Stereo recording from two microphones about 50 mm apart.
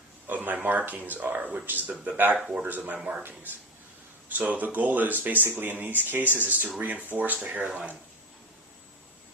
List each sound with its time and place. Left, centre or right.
0.3 s speech: right
4.3 s speech: right
7.7 s speech: right